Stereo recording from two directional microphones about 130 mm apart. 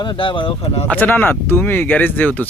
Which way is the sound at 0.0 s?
40° left (ahead or behind).